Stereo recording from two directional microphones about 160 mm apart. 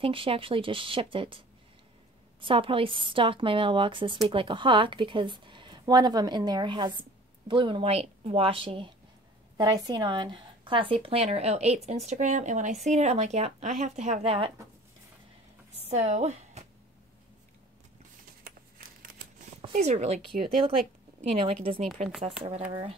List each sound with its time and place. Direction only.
0.0 s a woman's voice: 35° right (ahead or behind)
2.4 s a woman's voice: 35° right (ahead or behind)
15.8 s speech: 45° right (ahead or behind)
19.7 s a woman's voice: 45° right (ahead or behind)